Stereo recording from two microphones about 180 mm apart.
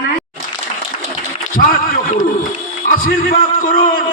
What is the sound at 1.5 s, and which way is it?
A man's voice, 50° left (ahead or behind).